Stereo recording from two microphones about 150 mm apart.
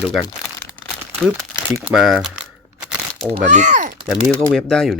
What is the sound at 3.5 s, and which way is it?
Speech, 55° right (ahead or behind).